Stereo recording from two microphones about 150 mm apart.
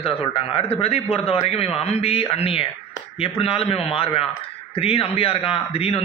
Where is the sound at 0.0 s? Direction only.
40° left (ahead or behind).